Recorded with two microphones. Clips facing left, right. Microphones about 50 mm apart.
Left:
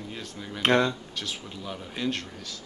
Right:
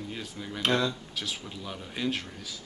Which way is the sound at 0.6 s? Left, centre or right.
Left.